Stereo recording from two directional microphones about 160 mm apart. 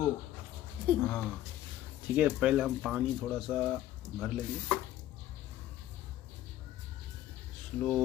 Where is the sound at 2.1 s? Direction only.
5° right (ahead or behind).